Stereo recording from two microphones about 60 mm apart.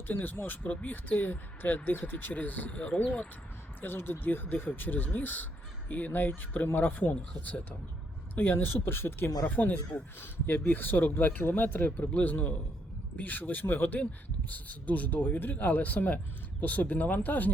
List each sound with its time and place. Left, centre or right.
0.1 s speech: left
3.8 s speech: left